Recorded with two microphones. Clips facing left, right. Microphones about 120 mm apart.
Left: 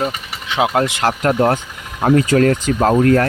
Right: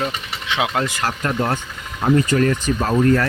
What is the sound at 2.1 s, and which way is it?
Speech, 75° left (ahead or behind).